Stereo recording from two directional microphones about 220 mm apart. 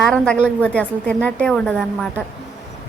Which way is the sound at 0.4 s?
5° left (ahead or behind).